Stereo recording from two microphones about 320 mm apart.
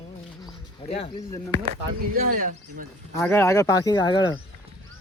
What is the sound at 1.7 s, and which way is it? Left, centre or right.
Speech, right.